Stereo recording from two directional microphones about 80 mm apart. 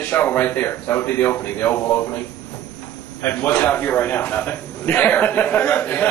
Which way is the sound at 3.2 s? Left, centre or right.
Left.